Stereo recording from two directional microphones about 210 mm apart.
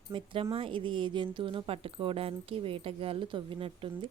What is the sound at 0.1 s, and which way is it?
Speech, 25° right (ahead or behind).